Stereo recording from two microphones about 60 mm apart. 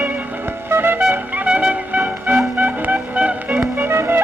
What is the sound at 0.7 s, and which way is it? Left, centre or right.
Music, right.